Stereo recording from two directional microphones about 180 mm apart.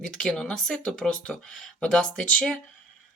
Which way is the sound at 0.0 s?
5° left (ahead or behind).